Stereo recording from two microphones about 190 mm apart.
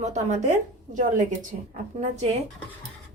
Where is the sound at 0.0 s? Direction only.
35° right (ahead or behind).